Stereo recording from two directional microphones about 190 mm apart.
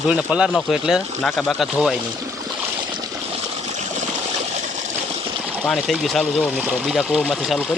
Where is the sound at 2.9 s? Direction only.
20° right (ahead or behind).